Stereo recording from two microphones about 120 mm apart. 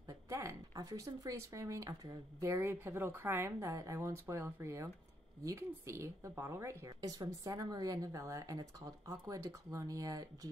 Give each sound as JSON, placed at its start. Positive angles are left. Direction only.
{"t": 0.0, "sound": "a woman's voice", "side_deg": -25}